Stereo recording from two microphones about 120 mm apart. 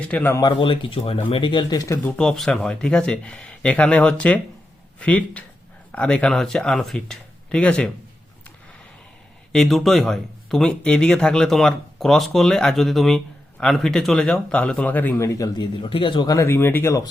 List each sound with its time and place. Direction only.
0.0 s speech: 15° left (ahead or behind)
0.3 s speech: 40° left (ahead or behind)
2.0 s speech: 10° left (ahead or behind)
9.5 s speech: centre (ahead or behind)
15.3 s speech: 35° left (ahead or behind)